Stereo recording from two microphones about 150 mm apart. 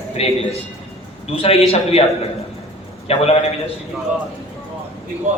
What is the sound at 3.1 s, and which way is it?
Speech, 40° left (ahead or behind).